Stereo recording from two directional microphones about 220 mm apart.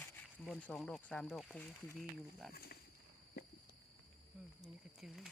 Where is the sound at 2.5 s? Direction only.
45° left (ahead or behind).